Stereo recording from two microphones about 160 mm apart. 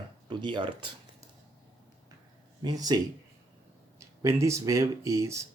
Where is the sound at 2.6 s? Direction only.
25° right (ahead or behind).